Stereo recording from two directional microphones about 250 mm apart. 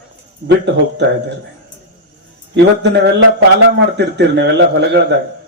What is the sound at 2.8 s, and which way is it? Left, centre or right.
Speech, right.